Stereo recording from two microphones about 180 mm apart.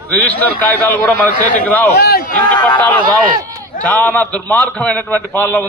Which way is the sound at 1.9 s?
60° left (ahead or behind).